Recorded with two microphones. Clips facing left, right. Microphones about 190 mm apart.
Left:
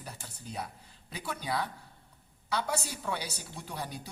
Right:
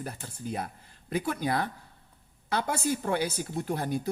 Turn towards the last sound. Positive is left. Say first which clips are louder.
# right 10 dB
turn(degrees=-50)  # may be behind; listen again after turning